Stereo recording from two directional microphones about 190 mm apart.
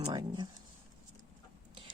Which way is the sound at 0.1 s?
20° right (ahead or behind).